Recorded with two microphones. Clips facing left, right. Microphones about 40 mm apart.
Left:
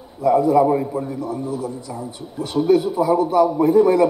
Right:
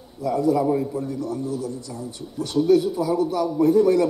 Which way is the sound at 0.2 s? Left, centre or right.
Left.